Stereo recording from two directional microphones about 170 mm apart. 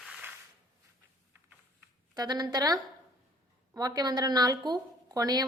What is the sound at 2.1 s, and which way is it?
A woman's voice, 25° right (ahead or behind).